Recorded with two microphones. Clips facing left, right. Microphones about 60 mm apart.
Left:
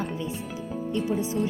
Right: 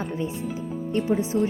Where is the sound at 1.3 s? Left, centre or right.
Right.